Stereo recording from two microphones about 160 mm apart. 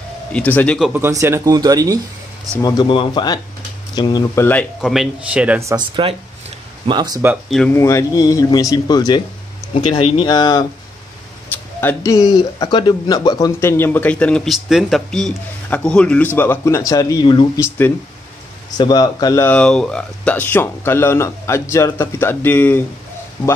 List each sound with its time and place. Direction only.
0.3 s speech: 10° left (ahead or behind)
0.9 s speech: 15° right (ahead or behind)
2.6 s speech: 30° left (ahead or behind)
4.8 s speech: centre (ahead or behind)
6.0 s speech: 30° right (ahead or behind)
7.4 s speech: centre (ahead or behind)
7.7 s speech: 20° left (ahead or behind)
11.8 s speech: 15° left (ahead or behind)
18.8 s speech: 25° left (ahead or behind)
19.4 s speech: 5° left (ahead or behind)